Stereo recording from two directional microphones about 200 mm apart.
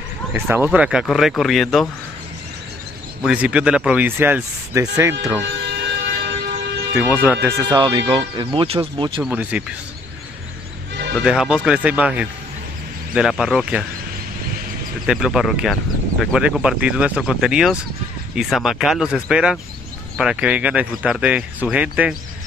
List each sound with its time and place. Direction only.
0.3 s speech: 10° right (ahead or behind)
3.2 s speech: 5° right (ahead or behind)
5.4 s a sound: 55° right (ahead or behind)
7.0 s speech: 10° right (ahead or behind); by 9.2 s 25° right (ahead or behind)
9.2 s speech: 5° right (ahead or behind)
11.1 s speech: 5° right (ahead or behind)
15.0 s speech: 5° right (ahead or behind)